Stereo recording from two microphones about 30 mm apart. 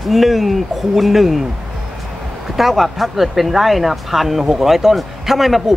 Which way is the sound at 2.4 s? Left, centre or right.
Centre.